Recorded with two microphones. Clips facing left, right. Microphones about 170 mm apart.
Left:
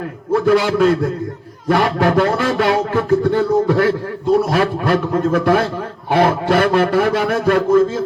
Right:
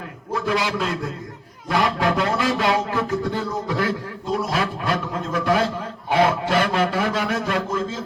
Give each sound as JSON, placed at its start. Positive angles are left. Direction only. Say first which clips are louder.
{"t": 0.3, "sound": "a man's voice", "louder": "left 9 dB", "side_deg": 55}